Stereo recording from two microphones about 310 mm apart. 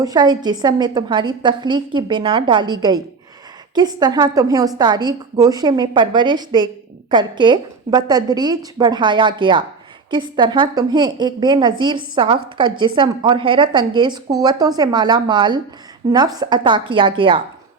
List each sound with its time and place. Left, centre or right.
0.0 s a woman's voice: centre